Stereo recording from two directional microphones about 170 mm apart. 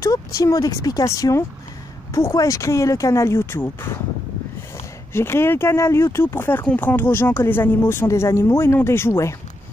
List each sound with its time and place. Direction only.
0.0 s speech: 20° left (ahead or behind)
5.1 s speech: 15° left (ahead or behind)